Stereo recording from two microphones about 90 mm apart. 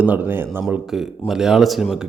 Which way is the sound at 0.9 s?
5° right (ahead or behind).